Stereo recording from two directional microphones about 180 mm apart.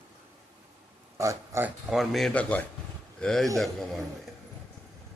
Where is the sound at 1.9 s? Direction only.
Centre (ahead or behind).